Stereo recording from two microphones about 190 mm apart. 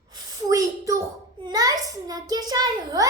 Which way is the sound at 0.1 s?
20° right (ahead or behind).